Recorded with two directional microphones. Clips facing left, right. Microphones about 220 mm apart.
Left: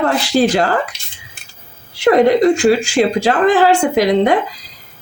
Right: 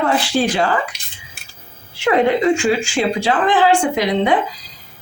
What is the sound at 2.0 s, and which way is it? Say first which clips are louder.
A woman's voice: left 4 dB; 40° left (ahead or behind).